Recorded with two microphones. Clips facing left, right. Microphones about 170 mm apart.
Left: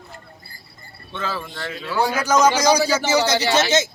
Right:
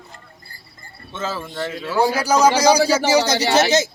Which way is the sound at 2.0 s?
35° right (ahead or behind).